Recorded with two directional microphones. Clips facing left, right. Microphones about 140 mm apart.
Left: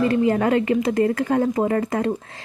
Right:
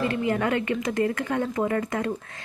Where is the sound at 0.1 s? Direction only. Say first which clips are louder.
Left 6 dB; 35° left (ahead or behind).